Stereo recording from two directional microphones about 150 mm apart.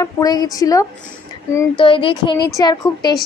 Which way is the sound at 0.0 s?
25° left (ahead or behind).